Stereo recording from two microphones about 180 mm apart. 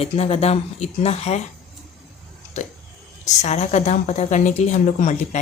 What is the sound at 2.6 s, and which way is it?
Speech, 40° left (ahead or behind).